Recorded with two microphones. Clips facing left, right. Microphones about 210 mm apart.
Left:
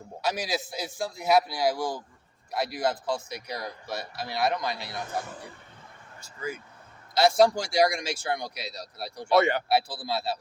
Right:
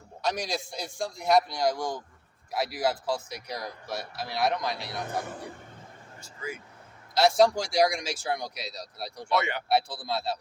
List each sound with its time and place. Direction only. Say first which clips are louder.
0.2 s speech: left 1 dB; 5° left (ahead or behind)
7.1 s speech: left 1 dB; centre (ahead or behind)
9.3 s speech: left 6 dB; 40° left (ahead or behind)
9.6 s speech: left 1 dB; centre (ahead or behind)